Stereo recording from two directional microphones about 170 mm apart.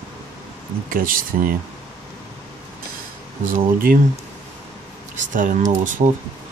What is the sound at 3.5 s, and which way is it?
Speech, 55° right (ahead or behind).